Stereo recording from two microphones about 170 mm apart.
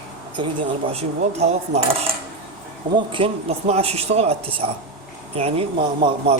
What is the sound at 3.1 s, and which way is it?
Speech, 35° right (ahead or behind).